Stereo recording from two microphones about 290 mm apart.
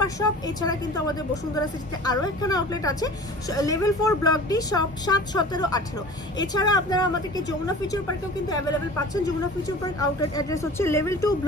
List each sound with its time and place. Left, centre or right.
0.0 s speech: centre